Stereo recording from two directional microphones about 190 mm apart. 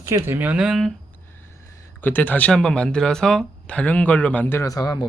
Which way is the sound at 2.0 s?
10° left (ahead or behind).